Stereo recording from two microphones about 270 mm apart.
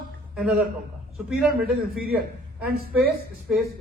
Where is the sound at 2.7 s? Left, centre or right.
Right.